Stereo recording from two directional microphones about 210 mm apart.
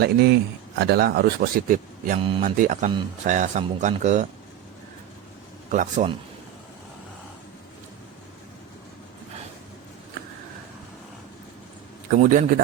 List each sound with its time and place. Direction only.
0.0 s a man's voice: 50° right (ahead or behind); by 4.3 s 35° right (ahead or behind)
5.7 s speech: 40° right (ahead or behind)
12.2 s speech: 40° right (ahead or behind)